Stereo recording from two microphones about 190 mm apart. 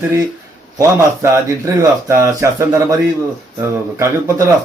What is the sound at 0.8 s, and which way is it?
A man's voice, 15° right (ahead or behind).